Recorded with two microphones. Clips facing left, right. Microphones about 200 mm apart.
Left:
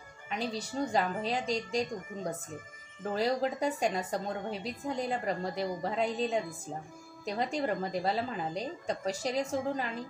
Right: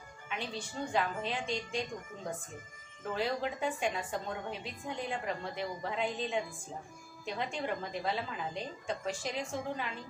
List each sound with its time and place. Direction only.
0.3 s a woman's voice: 40° left (ahead or behind)
3.2 s a woman's voice: 40° left (ahead or behind)